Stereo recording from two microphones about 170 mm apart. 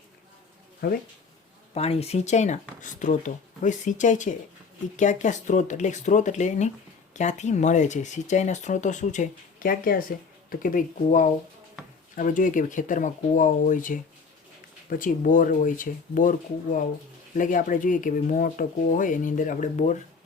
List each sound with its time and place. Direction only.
0.8 s speech: 65° left (ahead or behind)
1.7 s speech: 35° left (ahead or behind)
17.3 s speech: 50° left (ahead or behind)